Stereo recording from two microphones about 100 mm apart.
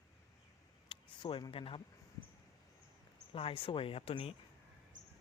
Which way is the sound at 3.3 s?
65° left (ahead or behind).